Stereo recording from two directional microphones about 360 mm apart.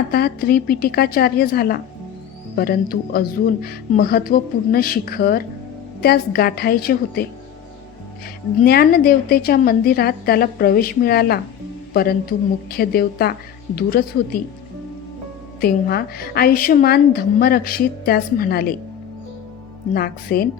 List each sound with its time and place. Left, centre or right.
0.1 s a woman's voice: left
8.6 s a woman's voice: left
12.7 s a woman's voice: left
15.6 s a woman's voice: left
19.9 s a woman's voice: left